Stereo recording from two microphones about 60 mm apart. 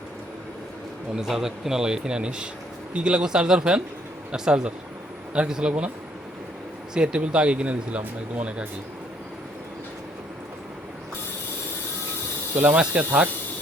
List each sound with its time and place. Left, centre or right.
1.1 s speech: centre
6.9 s speech: centre
12.7 s speech: centre